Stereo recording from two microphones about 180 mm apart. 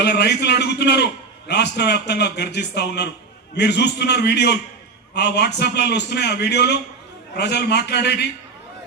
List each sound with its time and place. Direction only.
0.0 s a man's voice: 65° left (ahead or behind)